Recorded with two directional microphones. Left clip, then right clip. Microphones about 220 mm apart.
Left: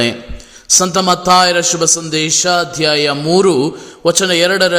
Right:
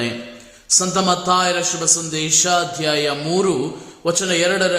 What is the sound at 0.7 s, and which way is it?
A man's voice, 35° left (ahead or behind).